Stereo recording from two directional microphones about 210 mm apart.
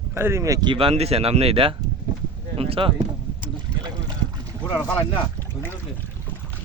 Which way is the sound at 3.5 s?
20° right (ahead or behind).